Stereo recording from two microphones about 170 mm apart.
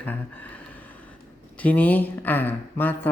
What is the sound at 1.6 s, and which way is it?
Speech, 10° left (ahead or behind).